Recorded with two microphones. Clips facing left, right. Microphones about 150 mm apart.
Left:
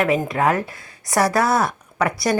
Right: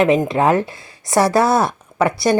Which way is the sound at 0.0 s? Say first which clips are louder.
Right 4 dB; 20° right (ahead or behind).